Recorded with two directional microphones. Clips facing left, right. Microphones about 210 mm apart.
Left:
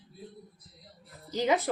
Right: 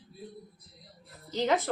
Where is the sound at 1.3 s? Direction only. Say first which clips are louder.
Left 1 dB; 10° left (ahead or behind).